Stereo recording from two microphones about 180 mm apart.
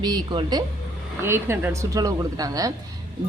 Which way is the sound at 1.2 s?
10° right (ahead or behind).